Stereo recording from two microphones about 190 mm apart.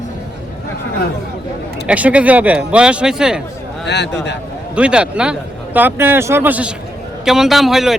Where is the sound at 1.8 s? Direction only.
5° right (ahead or behind).